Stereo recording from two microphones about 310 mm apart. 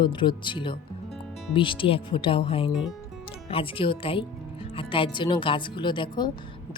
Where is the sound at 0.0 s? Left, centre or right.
Centre.